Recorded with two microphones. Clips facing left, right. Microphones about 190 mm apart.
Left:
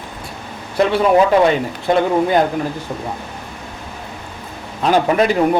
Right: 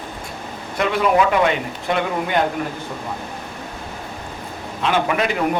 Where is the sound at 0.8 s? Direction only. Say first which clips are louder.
Left 4 dB; 35° left (ahead or behind).